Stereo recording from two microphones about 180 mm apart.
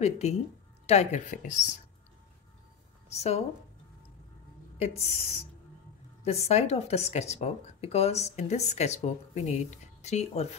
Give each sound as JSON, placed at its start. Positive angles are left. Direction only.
{"t": 0.0, "sound": "speech", "side_deg": 35}
{"t": 3.1, "sound": "a woman's voice", "side_deg": 35}
{"t": 4.7, "sound": "speech", "side_deg": 35}